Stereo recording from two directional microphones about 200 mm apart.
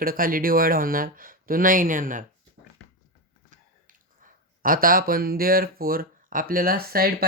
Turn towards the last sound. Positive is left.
turn(degrees=-45)  # may be behind; listen again after turning